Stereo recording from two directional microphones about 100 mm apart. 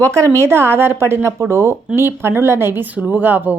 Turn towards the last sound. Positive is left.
turn(degrees=-20)  # may be behind; listen again after turning